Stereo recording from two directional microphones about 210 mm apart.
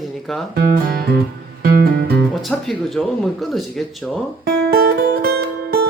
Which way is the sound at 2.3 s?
Centre (ahead or behind).